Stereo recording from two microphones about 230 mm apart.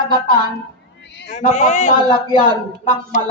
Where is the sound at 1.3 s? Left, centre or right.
Left.